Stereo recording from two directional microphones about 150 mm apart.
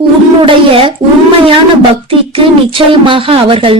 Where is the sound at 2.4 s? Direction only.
35° right (ahead or behind).